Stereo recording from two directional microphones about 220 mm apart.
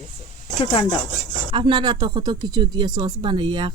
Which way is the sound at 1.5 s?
20° right (ahead or behind).